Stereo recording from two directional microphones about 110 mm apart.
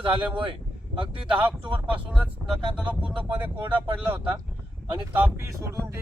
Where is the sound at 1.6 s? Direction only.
10° right (ahead or behind).